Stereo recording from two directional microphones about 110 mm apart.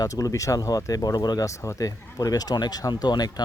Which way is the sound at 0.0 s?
30° left (ahead or behind).